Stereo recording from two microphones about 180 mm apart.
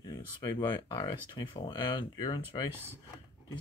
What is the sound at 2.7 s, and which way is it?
Speech, 10° right (ahead or behind).